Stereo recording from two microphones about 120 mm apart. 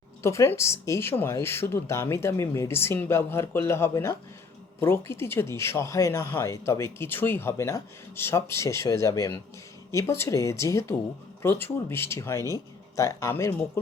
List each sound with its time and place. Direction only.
0.2 s speech: 20° left (ahead or behind)